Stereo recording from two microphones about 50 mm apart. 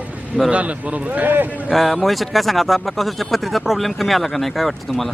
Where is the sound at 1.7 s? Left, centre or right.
Centre.